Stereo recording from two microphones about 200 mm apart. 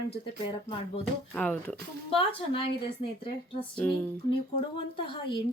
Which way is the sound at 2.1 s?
25° left (ahead or behind).